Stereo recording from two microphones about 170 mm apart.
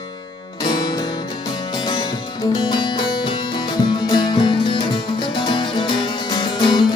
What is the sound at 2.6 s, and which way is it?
Music, 25° left (ahead or behind).